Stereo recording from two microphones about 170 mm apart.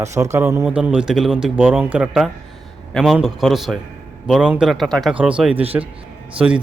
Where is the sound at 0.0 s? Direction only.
15° right (ahead or behind).